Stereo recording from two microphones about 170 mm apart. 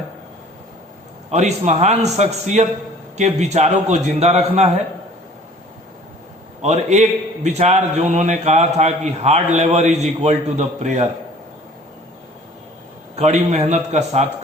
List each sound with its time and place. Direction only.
1.3 s a man's voice: 40° right (ahead or behind)
6.6 s a man's voice: 40° right (ahead or behind)
13.1 s a man's voice: 40° right (ahead or behind)